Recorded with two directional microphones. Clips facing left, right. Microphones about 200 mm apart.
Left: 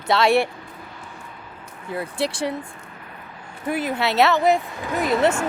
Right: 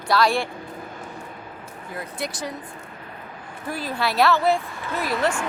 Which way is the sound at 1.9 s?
30° left (ahead or behind).